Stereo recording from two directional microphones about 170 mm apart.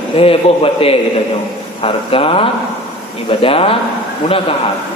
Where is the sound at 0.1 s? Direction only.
35° left (ahead or behind).